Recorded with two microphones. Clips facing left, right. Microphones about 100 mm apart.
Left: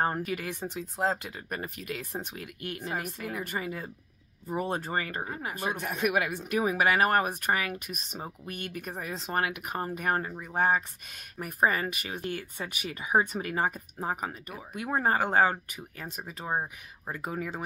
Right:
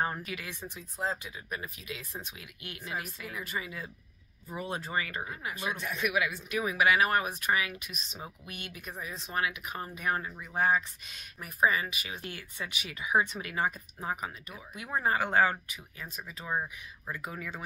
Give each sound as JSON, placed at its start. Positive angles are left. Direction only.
{"t": 0.0, "sound": "speech", "side_deg": 45}
{"t": 9.3, "sound": "speech", "side_deg": 55}
{"t": 14.7, "sound": "speech", "side_deg": 50}
{"t": 17.2, "sound": "speech", "side_deg": 40}